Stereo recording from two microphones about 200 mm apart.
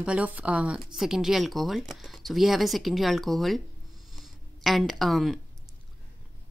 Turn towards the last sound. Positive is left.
turn(degrees=0)  # may be behind; listen again after turning